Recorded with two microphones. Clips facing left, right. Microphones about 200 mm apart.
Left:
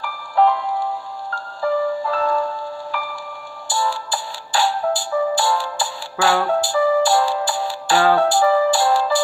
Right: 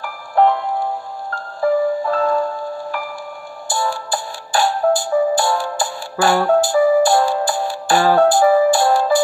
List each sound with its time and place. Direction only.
0.0 s music: 50° right (ahead or behind)